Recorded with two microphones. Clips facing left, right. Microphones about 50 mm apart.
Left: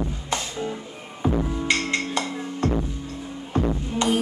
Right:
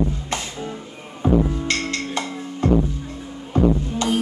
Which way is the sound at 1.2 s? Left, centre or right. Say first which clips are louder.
Right 5 dB; centre.